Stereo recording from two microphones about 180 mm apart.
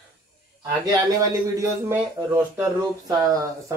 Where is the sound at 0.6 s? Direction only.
20° right (ahead or behind).